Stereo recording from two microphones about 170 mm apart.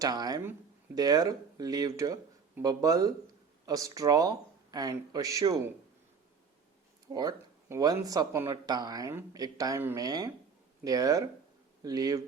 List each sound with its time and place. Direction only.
0.0 s speech: 25° right (ahead or behind)
7.1 s speech: 20° right (ahead or behind)